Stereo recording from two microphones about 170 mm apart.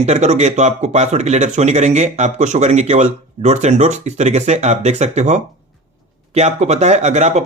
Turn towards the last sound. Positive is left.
turn(degrees=-40)  # may be behind; listen again after turning